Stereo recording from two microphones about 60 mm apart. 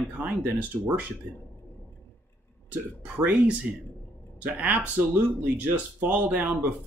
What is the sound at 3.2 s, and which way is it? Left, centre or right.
Speech, right.